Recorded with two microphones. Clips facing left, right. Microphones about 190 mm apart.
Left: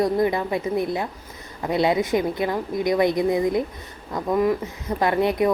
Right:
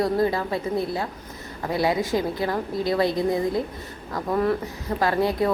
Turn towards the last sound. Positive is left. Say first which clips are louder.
# left 2 dB
turn(degrees=20)  # may be behind; listen again after turning